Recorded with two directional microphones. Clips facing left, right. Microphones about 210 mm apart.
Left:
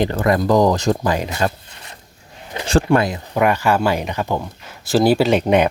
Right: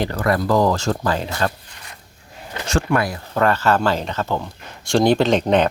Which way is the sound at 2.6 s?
30° left (ahead or behind).